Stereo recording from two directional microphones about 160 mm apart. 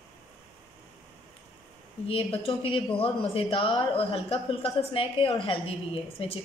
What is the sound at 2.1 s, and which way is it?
Speech, 35° left (ahead or behind).